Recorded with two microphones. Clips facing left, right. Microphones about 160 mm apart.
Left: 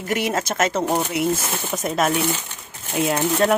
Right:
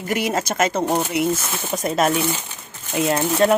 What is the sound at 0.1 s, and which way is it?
Speech, centre (ahead or behind).